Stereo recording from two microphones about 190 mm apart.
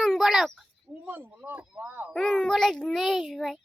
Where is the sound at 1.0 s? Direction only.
10° right (ahead or behind).